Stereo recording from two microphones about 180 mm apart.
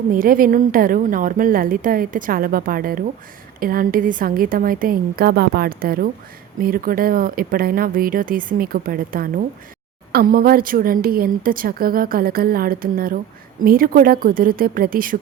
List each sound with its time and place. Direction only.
0.1 s a woman's voice: 50° right (ahead or behind)